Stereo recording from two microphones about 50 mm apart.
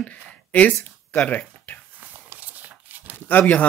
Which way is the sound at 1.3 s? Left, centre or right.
Left.